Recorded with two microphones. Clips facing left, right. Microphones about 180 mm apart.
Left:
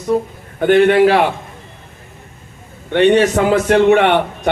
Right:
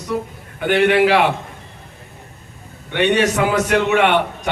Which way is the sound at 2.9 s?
55° left (ahead or behind).